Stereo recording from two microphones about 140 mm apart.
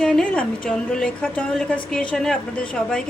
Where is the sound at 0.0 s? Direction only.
5° left (ahead or behind).